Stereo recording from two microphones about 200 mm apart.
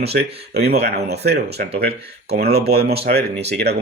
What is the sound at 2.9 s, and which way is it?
Speech, 30° right (ahead or behind).